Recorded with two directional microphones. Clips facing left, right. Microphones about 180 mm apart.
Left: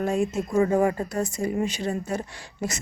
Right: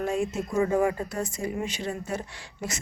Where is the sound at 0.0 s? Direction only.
40° left (ahead or behind).